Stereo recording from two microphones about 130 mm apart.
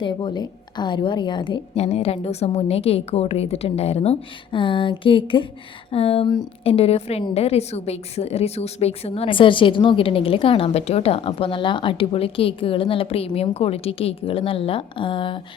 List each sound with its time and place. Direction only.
0.0 s a woman's voice: 35° left (ahead or behind)
1.7 s a woman's voice: 55° left (ahead or behind)